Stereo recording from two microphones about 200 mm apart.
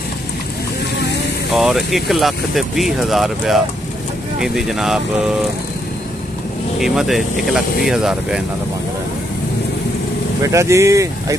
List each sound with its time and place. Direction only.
1.5 s speech: centre (ahead or behind)
6.8 s speech: centre (ahead or behind)
10.4 s speech: 15° right (ahead or behind)